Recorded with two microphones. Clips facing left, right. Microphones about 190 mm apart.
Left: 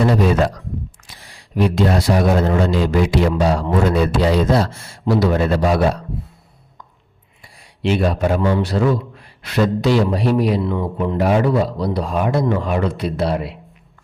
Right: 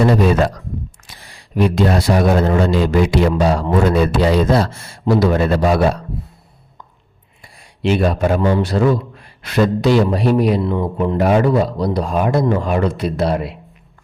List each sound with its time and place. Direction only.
1.0 s a man's voice: 55° right (ahead or behind)
7.4 s a sound: 50° right (ahead or behind)
8.4 s speech: 45° right (ahead or behind)
10.7 s speech: 35° right (ahead or behind)
11.2 s speech: 50° right (ahead or behind)